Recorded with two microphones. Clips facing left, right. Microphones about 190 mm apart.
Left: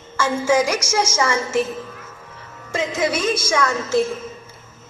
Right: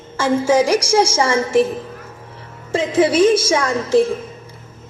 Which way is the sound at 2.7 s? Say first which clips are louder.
Right 6 dB; 30° right (ahead or behind).